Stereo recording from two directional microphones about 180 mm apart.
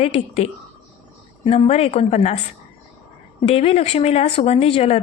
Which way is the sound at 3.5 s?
35° left (ahead or behind).